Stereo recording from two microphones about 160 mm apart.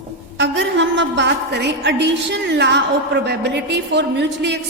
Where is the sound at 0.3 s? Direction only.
90° right.